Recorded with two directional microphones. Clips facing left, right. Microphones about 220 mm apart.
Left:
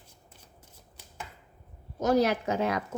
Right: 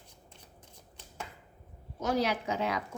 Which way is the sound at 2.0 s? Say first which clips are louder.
Left 6 dB; 45° left (ahead or behind).